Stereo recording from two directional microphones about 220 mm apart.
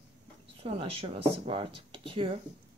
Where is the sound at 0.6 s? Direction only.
25° right (ahead or behind).